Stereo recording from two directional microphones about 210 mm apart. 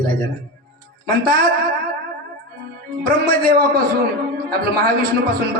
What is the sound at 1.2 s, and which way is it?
Speech, 45° right (ahead or behind).